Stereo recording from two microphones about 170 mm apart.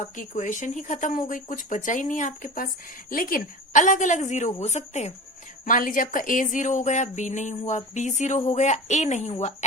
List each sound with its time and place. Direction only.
0.0 s a woman's voice: 45° left (ahead or behind)
5.6 s a woman's voice: 50° left (ahead or behind)